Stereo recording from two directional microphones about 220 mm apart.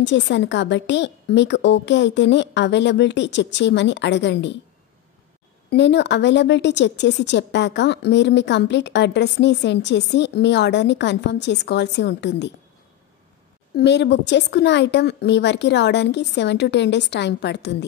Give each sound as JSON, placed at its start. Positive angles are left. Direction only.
{"t": 0.0, "sound": "a woman's voice", "side_deg": 55}
{"t": 5.7, "sound": "a woman's voice", "side_deg": 50}
{"t": 13.7, "sound": "a woman's voice", "side_deg": 50}